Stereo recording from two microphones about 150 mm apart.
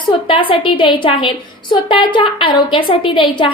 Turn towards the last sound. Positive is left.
turn(degrees=35)  # may be behind; listen again after turning